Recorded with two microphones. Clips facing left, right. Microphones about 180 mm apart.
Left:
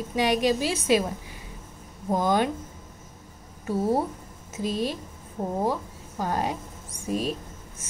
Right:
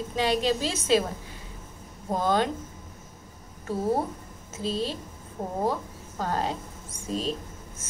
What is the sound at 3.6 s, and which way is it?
A woman's voice, 10° left (ahead or behind).